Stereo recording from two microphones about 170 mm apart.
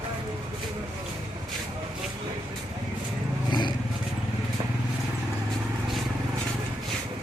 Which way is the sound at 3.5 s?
25° left (ahead or behind).